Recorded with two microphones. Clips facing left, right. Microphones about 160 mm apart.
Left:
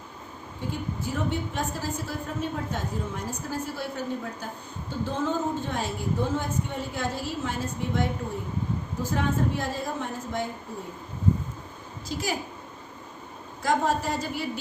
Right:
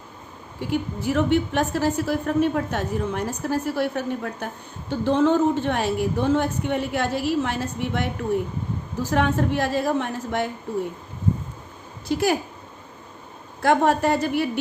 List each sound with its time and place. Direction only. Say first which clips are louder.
0.7 s a woman's voice: right 9 dB; 75° right (ahead or behind)
9.0 s a woman's voice: right 5 dB; 75° right (ahead or behind)
12.0 s a woman's voice: right 9 dB; 65° right (ahead or behind)
13.6 s a woman's voice: right 6 dB; 65° right (ahead or behind)